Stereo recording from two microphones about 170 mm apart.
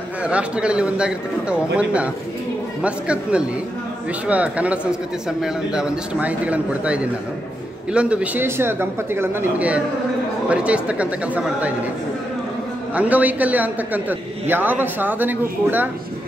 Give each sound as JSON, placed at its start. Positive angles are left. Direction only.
{"t": 0.2, "sound": "speech", "side_deg": -5}
{"t": 12.9, "sound": "speech", "side_deg": -10}